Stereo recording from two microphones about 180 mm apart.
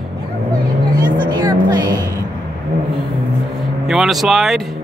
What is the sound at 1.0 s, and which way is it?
Music, 25° right (ahead or behind).